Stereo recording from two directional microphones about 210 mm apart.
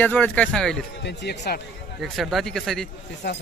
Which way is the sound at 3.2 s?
50° left (ahead or behind).